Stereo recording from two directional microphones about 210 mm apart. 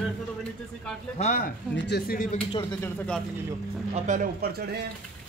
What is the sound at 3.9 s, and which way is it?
Speech, 35° right (ahead or behind).